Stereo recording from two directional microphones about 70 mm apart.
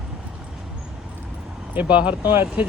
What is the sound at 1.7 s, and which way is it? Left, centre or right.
Speech, right.